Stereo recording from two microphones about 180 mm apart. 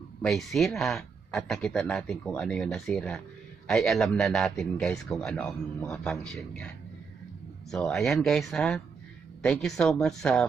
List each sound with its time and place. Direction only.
0.2 s a man's voice: centre (ahead or behind)
7.7 s a man's voice: 5° left (ahead or behind)